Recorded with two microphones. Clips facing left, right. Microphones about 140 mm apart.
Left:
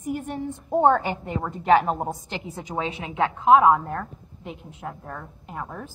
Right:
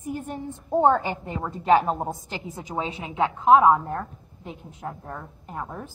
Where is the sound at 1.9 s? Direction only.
10° left (ahead or behind).